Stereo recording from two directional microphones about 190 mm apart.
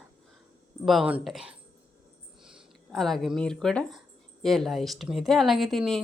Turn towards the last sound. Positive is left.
turn(degrees=0)  # may be behind; listen again after turning